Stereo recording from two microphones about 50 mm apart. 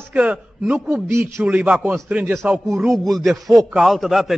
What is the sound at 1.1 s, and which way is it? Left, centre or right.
Speech, right.